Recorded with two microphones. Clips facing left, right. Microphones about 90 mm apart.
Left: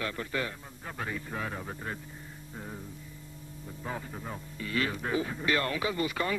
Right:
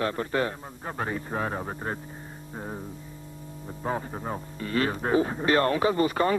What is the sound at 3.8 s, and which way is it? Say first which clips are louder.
Speech: right 8 dB; 40° right (ahead or behind).